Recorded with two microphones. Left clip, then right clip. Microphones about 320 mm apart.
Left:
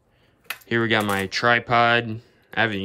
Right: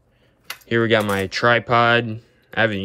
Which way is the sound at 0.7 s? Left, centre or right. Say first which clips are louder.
Right 3 dB; centre.